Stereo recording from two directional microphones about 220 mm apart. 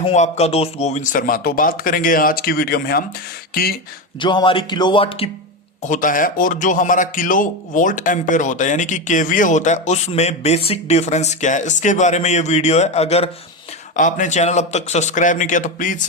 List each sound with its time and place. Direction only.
0.0 s a man's voice: 30° left (ahead or behind)
4.2 s speech: 20° left (ahead or behind)
5.8 s a man's voice: 35° left (ahead or behind)